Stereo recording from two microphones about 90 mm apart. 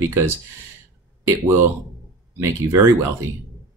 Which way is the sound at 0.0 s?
30° right (ahead or behind).